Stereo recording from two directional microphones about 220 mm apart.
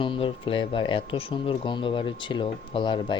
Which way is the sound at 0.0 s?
25° left (ahead or behind).